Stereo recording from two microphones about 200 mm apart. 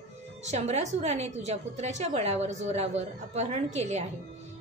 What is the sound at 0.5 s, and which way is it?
A woman's voice, 35° right (ahead or behind).